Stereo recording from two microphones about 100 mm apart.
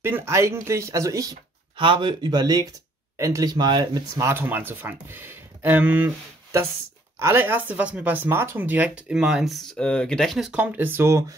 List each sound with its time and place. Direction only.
0.0 s speech: 25° right (ahead or behind)
1.8 s speech: 55° right (ahead or behind); by 3.5 s 30° right (ahead or behind)
3.5 s speech: 50° right (ahead or behind)
4.2 s speech: 25° right (ahead or behind)
7.2 s speech: 25° right (ahead or behind); by 10.5 s centre (ahead or behind)
10.5 s speech: 15° right (ahead or behind)